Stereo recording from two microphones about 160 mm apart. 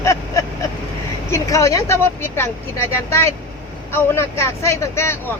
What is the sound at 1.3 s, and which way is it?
Speech, 20° left (ahead or behind).